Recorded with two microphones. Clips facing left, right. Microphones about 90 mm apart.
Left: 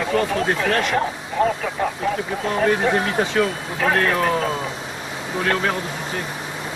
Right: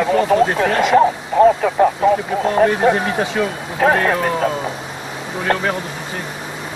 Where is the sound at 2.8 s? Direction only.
45° right (ahead or behind).